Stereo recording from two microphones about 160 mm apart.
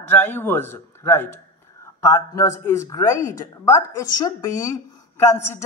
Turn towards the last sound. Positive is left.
turn(degrees=15)  # may be behind; listen again after turning